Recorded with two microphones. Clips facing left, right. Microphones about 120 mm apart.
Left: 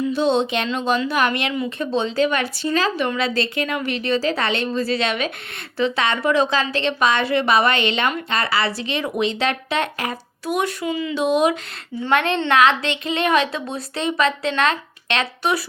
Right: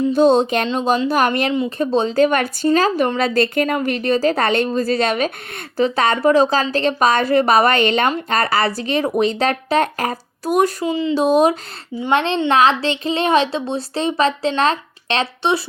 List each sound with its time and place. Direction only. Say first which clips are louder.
0.1 s a woman's voice: right 7 dB; 45° right (ahead or behind)